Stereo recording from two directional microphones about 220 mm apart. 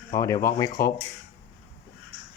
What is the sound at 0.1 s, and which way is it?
Speech, 15° left (ahead or behind).